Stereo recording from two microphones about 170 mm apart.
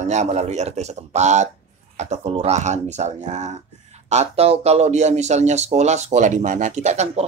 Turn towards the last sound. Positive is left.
turn(degrees=-40)  # may be behind; listen again after turning